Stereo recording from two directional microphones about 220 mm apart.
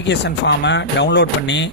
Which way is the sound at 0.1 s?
50° left (ahead or behind).